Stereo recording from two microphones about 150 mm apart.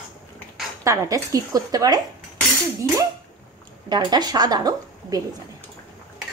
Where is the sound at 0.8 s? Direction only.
20° right (ahead or behind).